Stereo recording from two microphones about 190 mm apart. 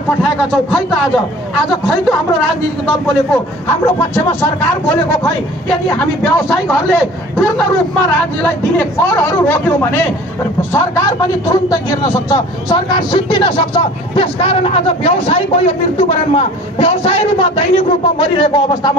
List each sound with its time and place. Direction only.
3.6 s speech: 10° left (ahead or behind)
5.9 s speech: 10° left (ahead or behind)